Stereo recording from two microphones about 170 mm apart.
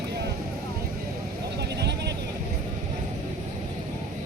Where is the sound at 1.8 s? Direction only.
80° right.